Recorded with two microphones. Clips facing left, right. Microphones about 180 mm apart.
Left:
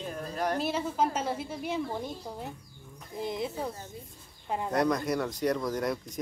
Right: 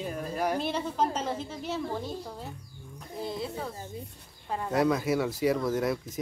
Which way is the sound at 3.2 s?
20° left (ahead or behind).